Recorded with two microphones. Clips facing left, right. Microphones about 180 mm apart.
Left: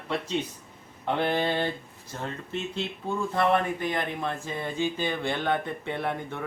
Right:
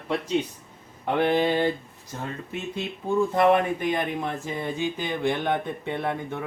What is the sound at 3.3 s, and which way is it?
Speech, 15° right (ahead or behind).